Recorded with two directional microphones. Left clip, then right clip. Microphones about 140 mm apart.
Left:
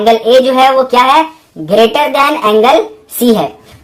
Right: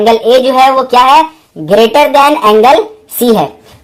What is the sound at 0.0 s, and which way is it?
A woman's voice, 50° right (ahead or behind).